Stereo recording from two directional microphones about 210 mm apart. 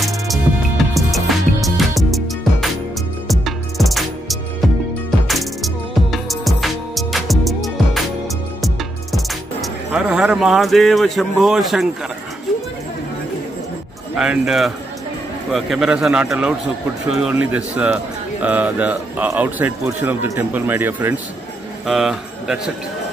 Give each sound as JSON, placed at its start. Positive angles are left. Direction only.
{"t": 0.3, "sound": "music", "side_deg": 0}
{"t": 14.1, "sound": "a man's voice", "side_deg": -5}